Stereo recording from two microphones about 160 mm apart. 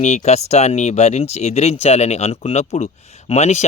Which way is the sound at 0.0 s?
45° left (ahead or behind).